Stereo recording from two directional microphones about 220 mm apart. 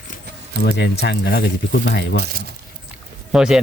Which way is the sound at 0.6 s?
50° left (ahead or behind).